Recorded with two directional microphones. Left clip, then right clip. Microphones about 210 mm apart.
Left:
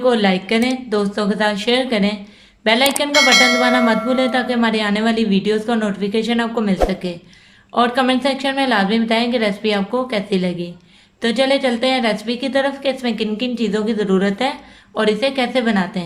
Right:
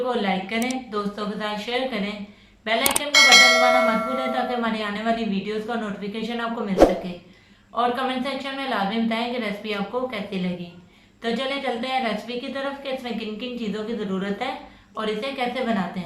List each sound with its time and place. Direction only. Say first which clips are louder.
0.1 s a woman's voice: left 8 dB; 50° left (ahead or behind)
3.1 s church bell: right 1 dB; centre (ahead or behind)
4.4 s a woman's voice: left 7 dB; 50° left (ahead or behind)